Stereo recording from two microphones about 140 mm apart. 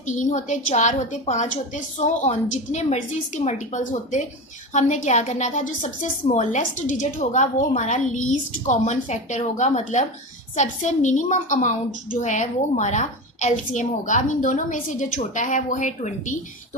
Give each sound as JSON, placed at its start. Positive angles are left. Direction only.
{"t": 0.0, "sound": "a woman's voice", "side_deg": 60}
{"t": 6.6, "sound": "a woman's voice", "side_deg": 70}